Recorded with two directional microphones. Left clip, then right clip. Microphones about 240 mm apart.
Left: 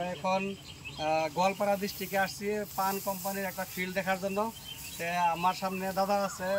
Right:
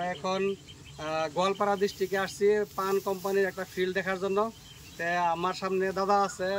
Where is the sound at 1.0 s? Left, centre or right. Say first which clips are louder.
Left 1 dB; centre.